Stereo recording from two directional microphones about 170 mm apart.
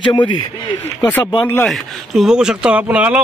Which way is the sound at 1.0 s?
15° left (ahead or behind).